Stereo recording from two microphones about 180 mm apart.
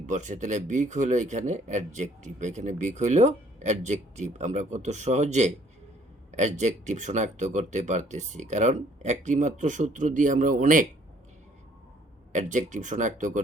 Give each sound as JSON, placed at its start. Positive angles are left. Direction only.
{"t": 0.0, "sound": "speech", "side_deg": -45}
{"t": 12.3, "sound": "speech", "side_deg": -45}